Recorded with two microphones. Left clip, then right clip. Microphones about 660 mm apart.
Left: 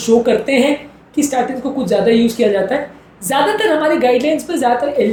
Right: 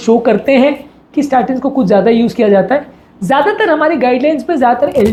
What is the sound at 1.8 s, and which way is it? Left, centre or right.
Speech, right.